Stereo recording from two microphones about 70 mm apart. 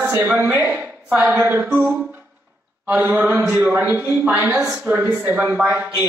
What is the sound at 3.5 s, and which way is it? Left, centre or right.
Speech, right.